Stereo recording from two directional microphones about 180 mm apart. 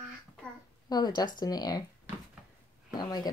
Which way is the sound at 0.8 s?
20° left (ahead or behind).